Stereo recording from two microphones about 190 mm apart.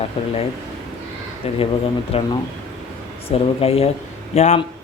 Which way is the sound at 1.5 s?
30° left (ahead or behind).